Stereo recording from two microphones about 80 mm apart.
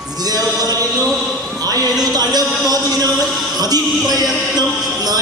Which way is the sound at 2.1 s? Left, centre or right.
Right.